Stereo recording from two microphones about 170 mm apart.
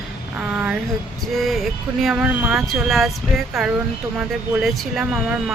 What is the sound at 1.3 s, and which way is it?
Speech, centre (ahead or behind).